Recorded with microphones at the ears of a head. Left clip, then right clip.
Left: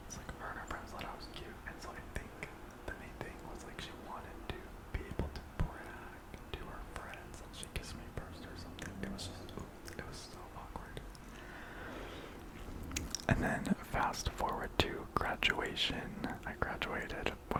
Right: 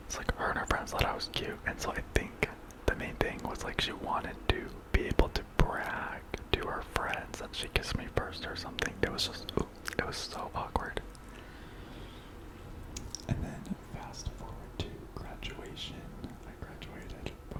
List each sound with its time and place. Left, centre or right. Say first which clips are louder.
0.1 s whispering: right 13 dB; right
13.2 s whispering: left 10 dB; left